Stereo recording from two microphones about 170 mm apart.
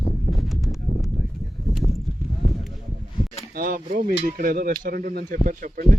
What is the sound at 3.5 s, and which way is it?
Speech, 55° right (ahead or behind).